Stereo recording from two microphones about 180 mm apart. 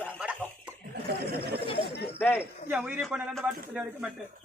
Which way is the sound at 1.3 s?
60° right (ahead or behind).